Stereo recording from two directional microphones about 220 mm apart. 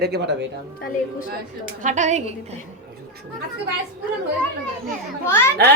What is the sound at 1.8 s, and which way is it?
Speech, 35° right (ahead or behind).